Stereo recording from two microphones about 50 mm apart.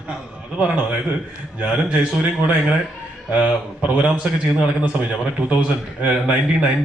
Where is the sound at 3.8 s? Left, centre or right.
Right.